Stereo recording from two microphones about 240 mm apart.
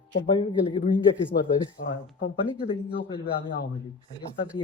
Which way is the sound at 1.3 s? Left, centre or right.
Left.